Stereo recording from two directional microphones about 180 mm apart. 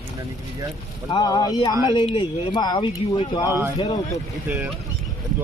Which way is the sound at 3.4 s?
15° right (ahead or behind).